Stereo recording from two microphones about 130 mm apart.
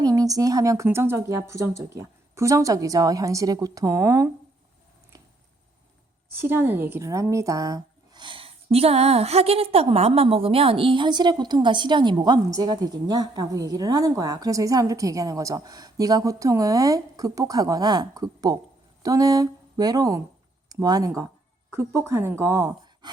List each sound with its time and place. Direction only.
0.0 s a woman's voice: 25° right (ahead or behind)
6.3 s speech: 15° right (ahead or behind)